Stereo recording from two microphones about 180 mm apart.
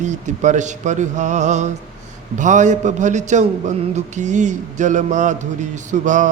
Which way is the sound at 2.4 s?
45° right (ahead or behind).